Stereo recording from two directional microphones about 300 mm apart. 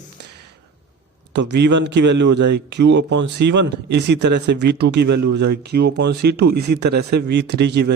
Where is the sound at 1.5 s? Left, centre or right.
Right.